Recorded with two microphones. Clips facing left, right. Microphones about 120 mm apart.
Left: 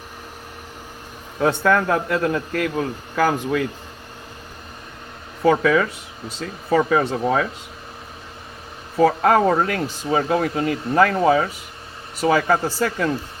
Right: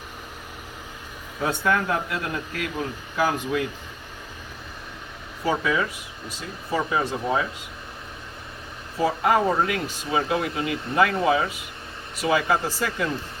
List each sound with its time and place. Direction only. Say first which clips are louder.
1.4 s speech: left 6 dB; 70° left (ahead or behind)
5.4 s speech: left 7 dB; 65° left (ahead or behind)
9.0 s speech: left 5 dB; 70° left (ahead or behind)
9.6 s speech: left 4 dB; 40° left (ahead or behind)